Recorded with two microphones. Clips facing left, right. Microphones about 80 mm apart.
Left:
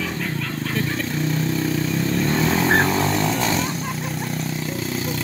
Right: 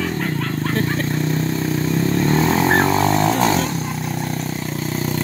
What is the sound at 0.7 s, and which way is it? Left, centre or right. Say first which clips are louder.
Vehicle: right 3 dB; right.